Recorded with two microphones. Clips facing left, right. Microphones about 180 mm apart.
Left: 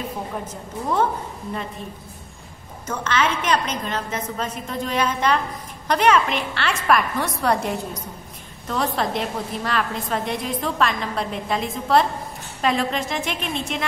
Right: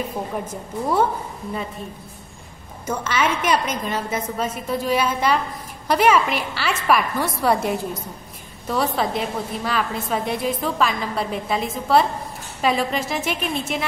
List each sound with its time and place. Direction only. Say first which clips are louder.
2.9 s a woman's voice: right 1 dB; 10° right (ahead or behind)